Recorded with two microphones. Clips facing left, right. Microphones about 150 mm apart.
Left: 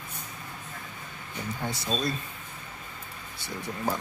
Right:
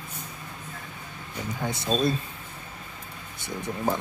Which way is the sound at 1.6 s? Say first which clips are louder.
Right 6 dB; 20° right (ahead or behind).